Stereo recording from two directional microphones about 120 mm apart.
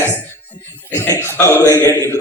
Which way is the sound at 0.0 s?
20° left (ahead or behind).